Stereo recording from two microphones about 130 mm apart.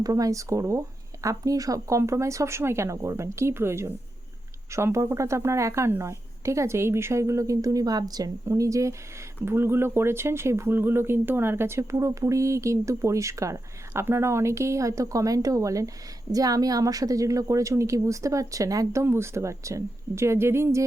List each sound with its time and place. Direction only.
0.0 s speech: 25° right (ahead or behind)